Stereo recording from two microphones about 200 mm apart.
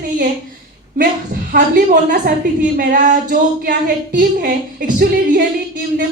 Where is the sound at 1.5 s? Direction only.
40° right (ahead or behind).